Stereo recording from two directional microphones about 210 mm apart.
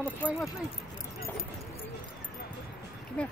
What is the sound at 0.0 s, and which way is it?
Speech, 5° left (ahead or behind).